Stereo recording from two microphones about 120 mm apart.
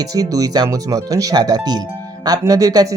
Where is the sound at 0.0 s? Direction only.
30° right (ahead or behind).